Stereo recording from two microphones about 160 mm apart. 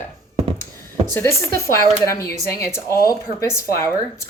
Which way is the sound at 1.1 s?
15° left (ahead or behind).